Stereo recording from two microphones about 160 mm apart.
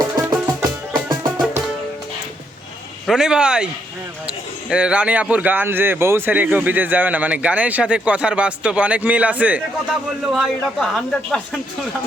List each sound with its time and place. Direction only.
0.0 s music: 25° right (ahead or behind)
3.1 s a man's voice: 5° right (ahead or behind)